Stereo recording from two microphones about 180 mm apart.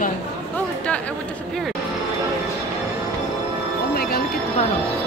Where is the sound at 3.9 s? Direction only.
55° left (ahead or behind).